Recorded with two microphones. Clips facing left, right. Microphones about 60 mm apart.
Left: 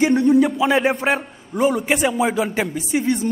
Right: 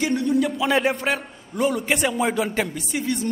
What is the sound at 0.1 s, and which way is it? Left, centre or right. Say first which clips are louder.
Music: left 6 dB; left.